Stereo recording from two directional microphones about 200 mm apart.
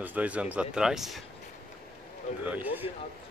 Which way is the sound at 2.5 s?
10° right (ahead or behind).